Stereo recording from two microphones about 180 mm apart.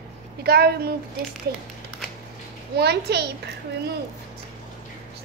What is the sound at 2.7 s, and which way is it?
Speech, 65° right (ahead or behind).